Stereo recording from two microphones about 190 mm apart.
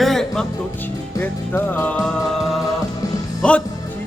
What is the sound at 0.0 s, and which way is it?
Music, centre (ahead or behind).